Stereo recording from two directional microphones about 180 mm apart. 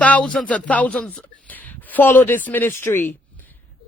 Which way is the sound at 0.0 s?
5° left (ahead or behind).